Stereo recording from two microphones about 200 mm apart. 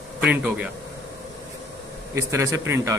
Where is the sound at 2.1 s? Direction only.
15° right (ahead or behind).